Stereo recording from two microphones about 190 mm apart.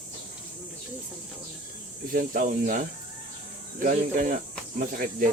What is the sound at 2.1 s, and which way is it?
Speech, 50° right (ahead or behind).